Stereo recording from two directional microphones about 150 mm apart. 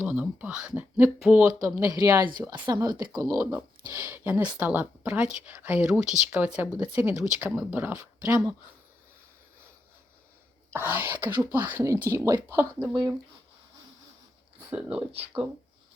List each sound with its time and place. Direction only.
0.0 s speech: 10° right (ahead or behind)
1.5 s a woman's voice: 20° right (ahead or behind)
3.3 s speech: 10° right (ahead or behind)
10.7 s speech: 15° right (ahead or behind)
14.7 s speech: 10° right (ahead or behind)